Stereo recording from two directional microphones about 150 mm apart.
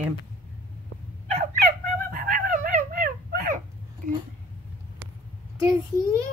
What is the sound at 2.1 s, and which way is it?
Dog, 65° right (ahead or behind).